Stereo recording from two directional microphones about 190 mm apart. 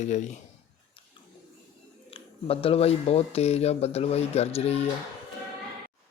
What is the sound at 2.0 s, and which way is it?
Speech, 30° left (ahead or behind).